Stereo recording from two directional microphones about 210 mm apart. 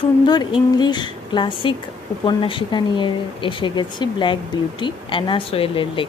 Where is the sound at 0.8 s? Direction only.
20° left (ahead or behind).